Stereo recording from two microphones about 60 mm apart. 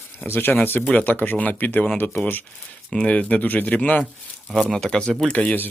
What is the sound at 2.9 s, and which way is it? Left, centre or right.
Speech, centre.